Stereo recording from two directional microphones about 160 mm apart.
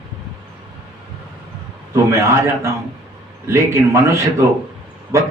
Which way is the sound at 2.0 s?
15° right (ahead or behind).